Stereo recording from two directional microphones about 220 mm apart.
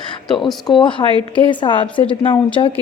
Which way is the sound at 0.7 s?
20° left (ahead or behind).